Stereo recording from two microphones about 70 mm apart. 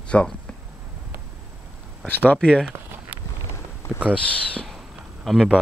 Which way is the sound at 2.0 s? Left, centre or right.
Left.